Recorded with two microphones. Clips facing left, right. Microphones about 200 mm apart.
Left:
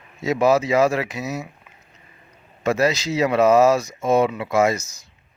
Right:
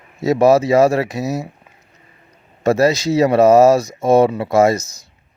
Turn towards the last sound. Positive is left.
turn(degrees=-75)  # may be behind; listen again after turning